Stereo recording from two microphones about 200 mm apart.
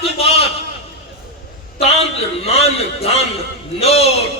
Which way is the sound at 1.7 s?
30° left (ahead or behind).